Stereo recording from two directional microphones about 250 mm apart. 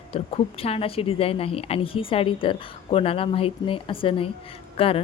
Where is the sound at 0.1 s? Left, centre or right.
Left.